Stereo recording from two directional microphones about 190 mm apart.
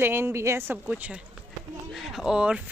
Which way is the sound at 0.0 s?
10° right (ahead or behind).